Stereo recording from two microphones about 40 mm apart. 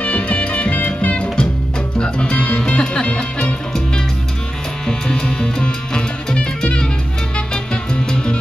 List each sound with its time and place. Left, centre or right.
0.0 s music: left
1.1 s music: left
4.8 s music: centre